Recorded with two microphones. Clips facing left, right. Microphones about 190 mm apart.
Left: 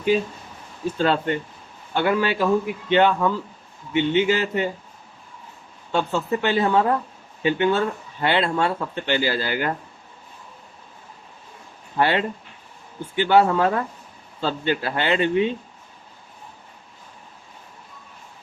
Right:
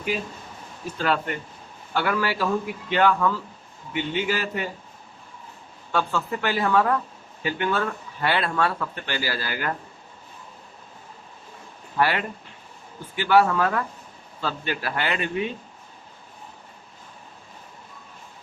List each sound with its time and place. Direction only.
0.9 s speech: 25° left (ahead or behind)
5.9 s speech: 25° left (ahead or behind)
11.9 s speech: 25° left (ahead or behind)